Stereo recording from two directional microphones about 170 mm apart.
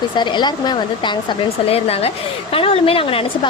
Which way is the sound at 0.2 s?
25° left (ahead or behind).